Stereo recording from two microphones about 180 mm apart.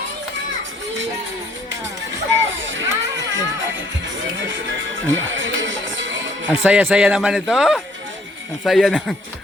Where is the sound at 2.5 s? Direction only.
90° right.